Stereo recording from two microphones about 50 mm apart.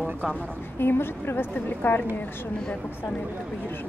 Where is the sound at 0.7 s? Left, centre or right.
Left.